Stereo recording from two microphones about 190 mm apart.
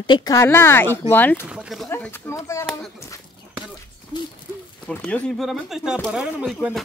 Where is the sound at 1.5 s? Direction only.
5° right (ahead or behind).